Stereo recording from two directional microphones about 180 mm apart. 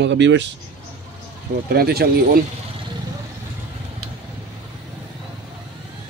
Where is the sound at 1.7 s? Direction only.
60° right (ahead or behind).